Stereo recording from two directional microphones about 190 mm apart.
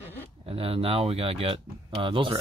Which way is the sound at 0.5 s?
30° right (ahead or behind).